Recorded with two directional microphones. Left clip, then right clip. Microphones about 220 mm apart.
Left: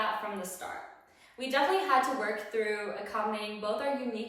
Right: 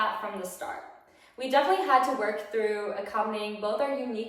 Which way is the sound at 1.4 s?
15° right (ahead or behind).